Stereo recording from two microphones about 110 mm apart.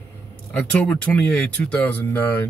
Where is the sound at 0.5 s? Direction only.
10° left (ahead or behind).